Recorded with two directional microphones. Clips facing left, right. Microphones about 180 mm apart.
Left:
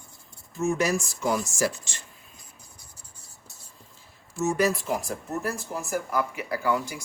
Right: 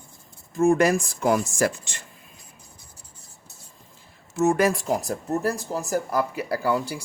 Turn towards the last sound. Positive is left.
turn(degrees=-35)  # may be behind; listen again after turning